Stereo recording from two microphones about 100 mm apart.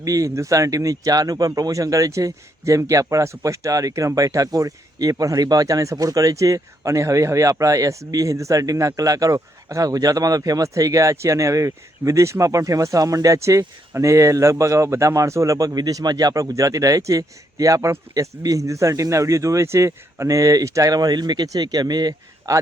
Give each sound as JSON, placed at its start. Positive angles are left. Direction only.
{"t": 0.0, "sound": "speech", "side_deg": -35}